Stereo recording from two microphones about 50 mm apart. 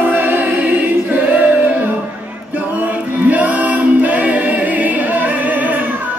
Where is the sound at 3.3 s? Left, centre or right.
Right.